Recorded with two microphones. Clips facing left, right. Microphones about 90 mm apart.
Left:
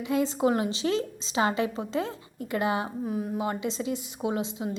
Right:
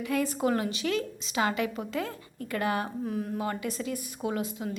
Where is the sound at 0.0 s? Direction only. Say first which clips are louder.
Left 3 dB; 25° left (ahead or behind).